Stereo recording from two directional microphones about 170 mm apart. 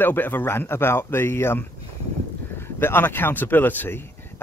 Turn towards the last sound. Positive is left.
turn(degrees=15)  # may be behind; listen again after turning